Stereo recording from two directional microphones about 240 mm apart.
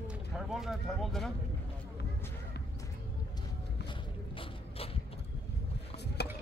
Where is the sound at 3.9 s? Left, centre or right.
Left.